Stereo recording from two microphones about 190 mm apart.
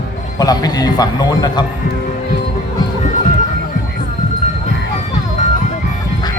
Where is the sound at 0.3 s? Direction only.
20° left (ahead or behind).